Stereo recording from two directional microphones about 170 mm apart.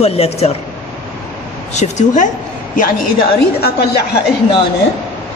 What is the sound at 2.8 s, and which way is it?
A woman's voice, 60° left (ahead or behind).